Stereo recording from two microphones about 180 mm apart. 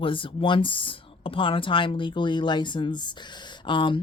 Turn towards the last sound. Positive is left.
turn(degrees=25)  # may be behind; listen again after turning